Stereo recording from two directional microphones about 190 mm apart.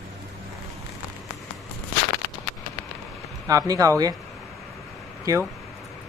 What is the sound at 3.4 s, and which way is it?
Speech, 20° right (ahead or behind).